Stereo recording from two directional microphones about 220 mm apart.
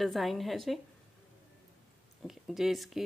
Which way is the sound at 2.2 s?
Centre (ahead or behind).